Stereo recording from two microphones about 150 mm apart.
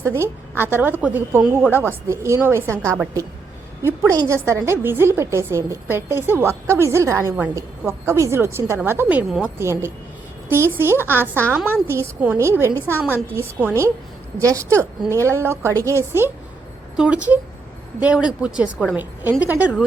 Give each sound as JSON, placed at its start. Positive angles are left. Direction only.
{"t": 0.2, "sound": "a woman's voice", "side_deg": -15}